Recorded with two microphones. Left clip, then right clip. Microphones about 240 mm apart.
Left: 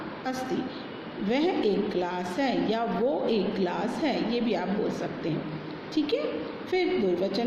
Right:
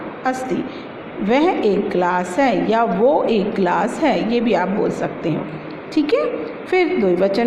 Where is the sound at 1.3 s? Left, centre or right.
Right.